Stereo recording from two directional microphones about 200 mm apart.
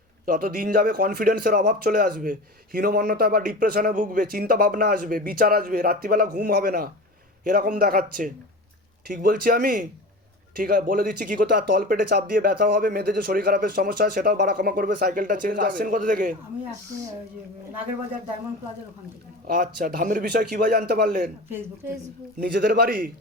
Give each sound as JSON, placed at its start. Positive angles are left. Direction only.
{"t": 0.3, "sound": "a man's voice", "side_deg": -45}
{"t": 19.5, "sound": "a man's voice", "side_deg": -45}
{"t": 22.4, "sound": "a man's voice", "side_deg": -50}